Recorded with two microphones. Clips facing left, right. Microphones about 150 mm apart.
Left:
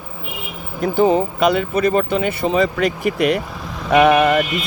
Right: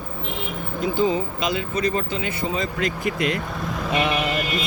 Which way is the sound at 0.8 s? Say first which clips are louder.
Left 6 dB; 60° left (ahead or behind).